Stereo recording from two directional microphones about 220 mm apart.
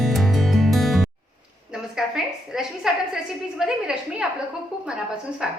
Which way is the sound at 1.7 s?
Centre (ahead or behind).